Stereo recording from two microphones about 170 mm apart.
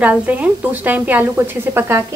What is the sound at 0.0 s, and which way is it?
Speech, 10° right (ahead or behind).